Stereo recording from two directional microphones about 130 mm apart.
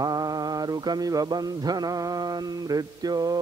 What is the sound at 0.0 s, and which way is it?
Mantra, 30° right (ahead or behind).